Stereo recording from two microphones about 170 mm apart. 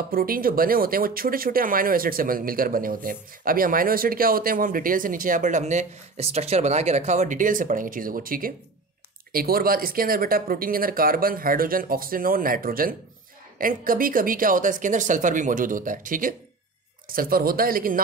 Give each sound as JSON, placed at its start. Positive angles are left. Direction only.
{"t": 0.1, "sound": "speech", "side_deg": -60}